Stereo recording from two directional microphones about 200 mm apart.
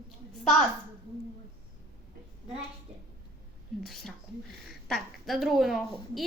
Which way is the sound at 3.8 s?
Centre (ahead or behind).